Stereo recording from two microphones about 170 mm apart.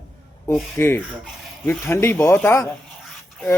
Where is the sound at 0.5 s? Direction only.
Centre (ahead or behind).